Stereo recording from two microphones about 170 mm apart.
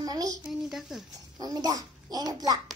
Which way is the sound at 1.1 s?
20° right (ahead or behind).